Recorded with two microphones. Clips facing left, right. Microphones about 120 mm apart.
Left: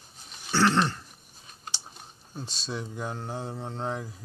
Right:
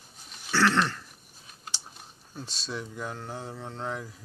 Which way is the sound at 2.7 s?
25° left (ahead or behind).